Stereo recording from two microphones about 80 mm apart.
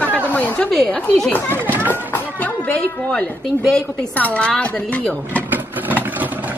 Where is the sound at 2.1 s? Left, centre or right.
Centre.